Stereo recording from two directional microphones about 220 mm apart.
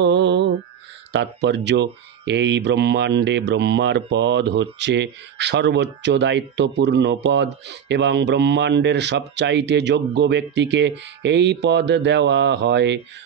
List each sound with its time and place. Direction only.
0.0 s music: 50° right (ahead or behind)
1.1 s speech: 50° right (ahead or behind)